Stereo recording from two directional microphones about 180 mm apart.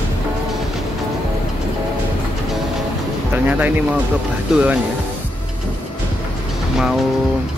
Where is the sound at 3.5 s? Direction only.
10° right (ahead or behind).